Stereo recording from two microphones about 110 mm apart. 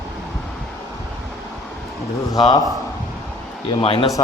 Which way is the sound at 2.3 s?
40° left (ahead or behind).